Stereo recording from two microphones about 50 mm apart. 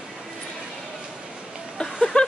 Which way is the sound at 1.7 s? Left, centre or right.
Centre.